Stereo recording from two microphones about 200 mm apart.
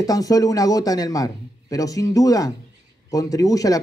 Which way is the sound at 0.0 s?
20° left (ahead or behind).